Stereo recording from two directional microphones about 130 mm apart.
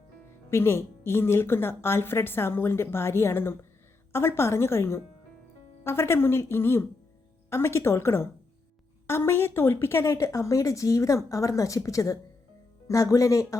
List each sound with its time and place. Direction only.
0.5 s a woman's voice: 20° left (ahead or behind)